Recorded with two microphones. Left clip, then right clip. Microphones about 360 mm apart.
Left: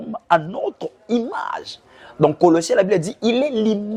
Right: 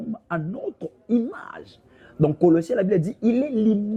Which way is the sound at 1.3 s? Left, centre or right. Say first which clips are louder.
Left 12 dB; left.